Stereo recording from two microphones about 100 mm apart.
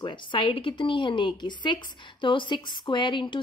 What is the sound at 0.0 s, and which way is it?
A woman's voice, 55° left (ahead or behind).